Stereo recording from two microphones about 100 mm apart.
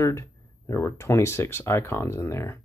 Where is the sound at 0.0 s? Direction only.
30° left (ahead or behind).